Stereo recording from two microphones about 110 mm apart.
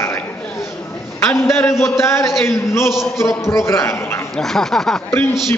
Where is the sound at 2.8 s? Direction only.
5° right (ahead or behind).